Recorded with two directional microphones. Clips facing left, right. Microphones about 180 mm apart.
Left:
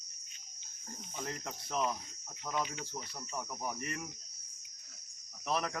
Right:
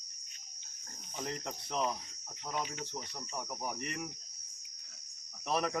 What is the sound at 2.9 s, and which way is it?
Cricket, 5° left (ahead or behind).